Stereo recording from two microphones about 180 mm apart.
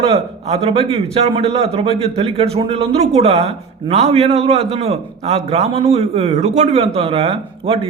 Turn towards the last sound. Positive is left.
turn(degrees=-30)  # may be behind; listen again after turning